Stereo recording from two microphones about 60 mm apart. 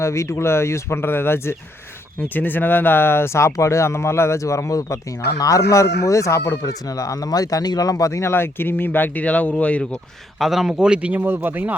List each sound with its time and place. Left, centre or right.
0.0 s speech: left
6.7 s speech: left
8.1 s speech: left
10.4 s speech: centre
10.8 s speech: centre
11.3 s speech: right